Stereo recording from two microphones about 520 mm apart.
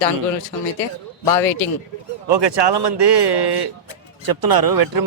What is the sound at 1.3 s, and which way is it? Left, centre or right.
Speech, left.